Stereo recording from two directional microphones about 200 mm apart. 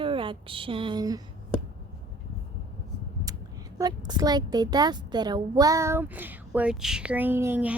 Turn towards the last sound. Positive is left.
turn(degrees=-10)  # may be behind; listen again after turning